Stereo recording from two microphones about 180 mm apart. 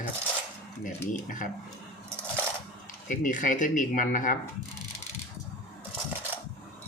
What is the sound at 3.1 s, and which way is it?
Speech, 45° left (ahead or behind).